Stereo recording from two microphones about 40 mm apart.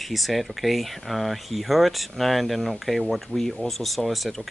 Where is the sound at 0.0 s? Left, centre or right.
Centre.